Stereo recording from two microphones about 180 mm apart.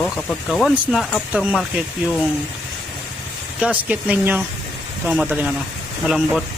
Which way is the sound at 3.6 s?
10° right (ahead or behind).